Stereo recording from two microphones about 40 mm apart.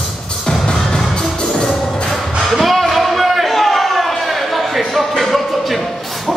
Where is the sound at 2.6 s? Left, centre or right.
Centre.